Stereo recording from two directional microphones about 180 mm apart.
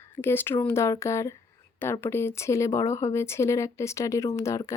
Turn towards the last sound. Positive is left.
turn(degrees=15)  # may be behind; listen again after turning